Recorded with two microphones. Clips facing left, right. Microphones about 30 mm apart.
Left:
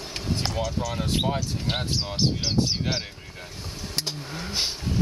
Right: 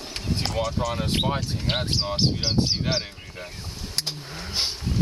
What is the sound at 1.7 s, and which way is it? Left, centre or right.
Speech, right.